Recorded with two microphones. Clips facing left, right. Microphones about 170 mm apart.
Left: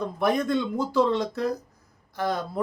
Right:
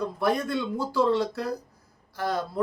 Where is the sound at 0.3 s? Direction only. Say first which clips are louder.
Left 3 dB; 20° left (ahead or behind).